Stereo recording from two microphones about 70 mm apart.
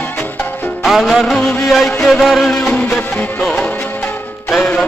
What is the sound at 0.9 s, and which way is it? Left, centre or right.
Music, centre.